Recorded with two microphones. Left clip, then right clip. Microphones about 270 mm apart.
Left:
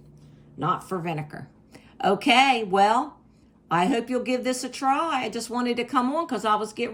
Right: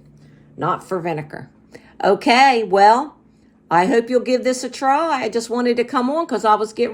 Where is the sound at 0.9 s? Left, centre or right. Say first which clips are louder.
Right 7 dB; centre.